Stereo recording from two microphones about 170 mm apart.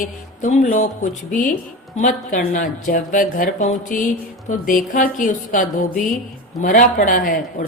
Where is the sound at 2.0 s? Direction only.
50° left (ahead or behind).